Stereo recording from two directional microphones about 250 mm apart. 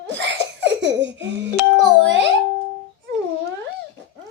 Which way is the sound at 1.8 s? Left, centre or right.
Right.